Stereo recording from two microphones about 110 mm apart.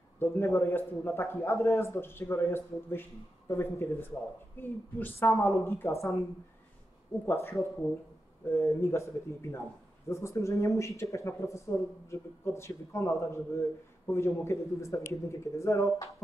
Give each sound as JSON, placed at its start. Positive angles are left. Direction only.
{"t": 0.2, "sound": "a man's voice", "side_deg": 25}
{"t": 7.2, "sound": "a man's voice", "side_deg": 25}